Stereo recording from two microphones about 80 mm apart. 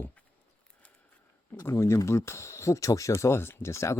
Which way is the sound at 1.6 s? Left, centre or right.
Left.